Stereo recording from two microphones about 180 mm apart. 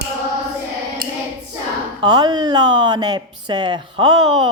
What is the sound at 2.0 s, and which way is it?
Speech, 25° right (ahead or behind).